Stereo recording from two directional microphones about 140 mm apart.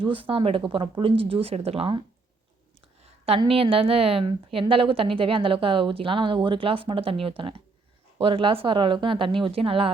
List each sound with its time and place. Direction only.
0.0 s a woman's voice: 40° right (ahead or behind)